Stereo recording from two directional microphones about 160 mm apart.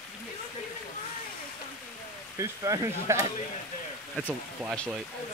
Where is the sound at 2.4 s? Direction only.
20° right (ahead or behind).